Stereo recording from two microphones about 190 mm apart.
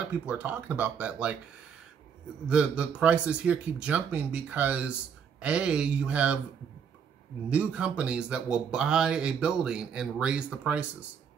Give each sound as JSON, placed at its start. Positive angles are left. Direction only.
{"t": 0.1, "sound": "a man's voice", "side_deg": -10}
{"t": 2.4, "sound": "a man's voice", "side_deg": -5}
{"t": 7.4, "sound": "speech", "side_deg": -5}